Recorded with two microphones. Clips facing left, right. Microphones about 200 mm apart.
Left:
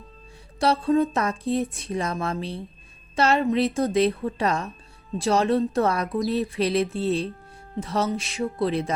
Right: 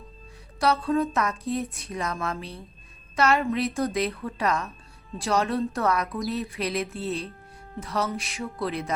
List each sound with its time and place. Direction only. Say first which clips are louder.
0.6 s speech: left 3 dB; 25° left (ahead or behind)